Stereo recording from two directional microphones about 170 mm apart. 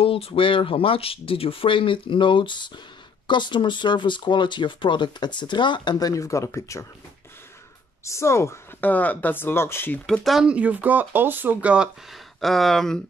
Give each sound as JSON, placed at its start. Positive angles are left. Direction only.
{"t": 0.0, "sound": "speech", "side_deg": 35}
{"t": 8.0, "sound": "speech", "side_deg": 15}
{"t": 10.0, "sound": "speech", "side_deg": 0}